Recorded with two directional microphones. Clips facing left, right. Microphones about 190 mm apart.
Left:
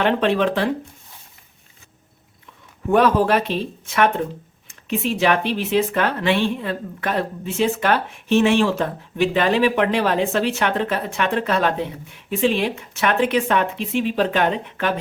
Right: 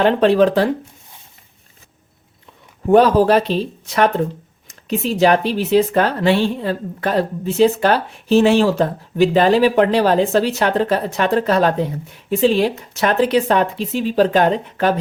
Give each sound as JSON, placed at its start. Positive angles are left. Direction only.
{"t": 0.0, "sound": "speech", "side_deg": -40}
{"t": 2.9, "sound": "speech", "side_deg": -35}